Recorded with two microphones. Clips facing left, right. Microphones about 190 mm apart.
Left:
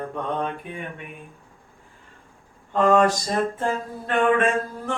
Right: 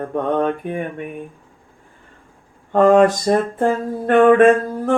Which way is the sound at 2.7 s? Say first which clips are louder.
Right 6 dB; 55° right (ahead or behind).